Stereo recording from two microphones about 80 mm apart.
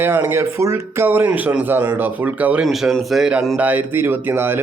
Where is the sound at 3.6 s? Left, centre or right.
Right.